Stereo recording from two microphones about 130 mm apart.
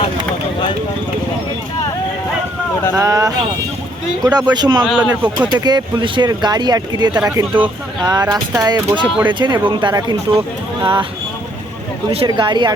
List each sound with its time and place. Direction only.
2.9 s speech: 25° right (ahead or behind)
4.9 s speech: 10° right (ahead or behind)
5.5 s speech: 35° right (ahead or behind)
12.1 s speech: 40° right (ahead or behind)